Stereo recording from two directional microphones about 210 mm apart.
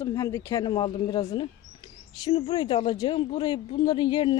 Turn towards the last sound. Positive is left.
turn(degrees=20)  # may be behind; listen again after turning